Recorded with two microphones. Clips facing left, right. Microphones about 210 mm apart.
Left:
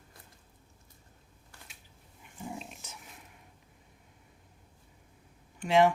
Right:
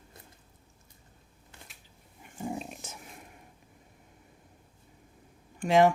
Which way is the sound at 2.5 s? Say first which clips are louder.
Right 5 dB; 45° right (ahead or behind).